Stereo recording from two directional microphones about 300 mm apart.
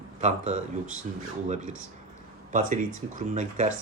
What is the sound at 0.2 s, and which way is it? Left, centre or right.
Speech, right.